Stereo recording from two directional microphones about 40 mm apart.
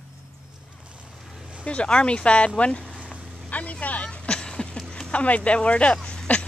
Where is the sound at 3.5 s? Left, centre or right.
Left.